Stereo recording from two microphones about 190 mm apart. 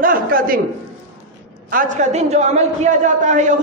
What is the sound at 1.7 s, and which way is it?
A man's voice, 45° right (ahead or behind).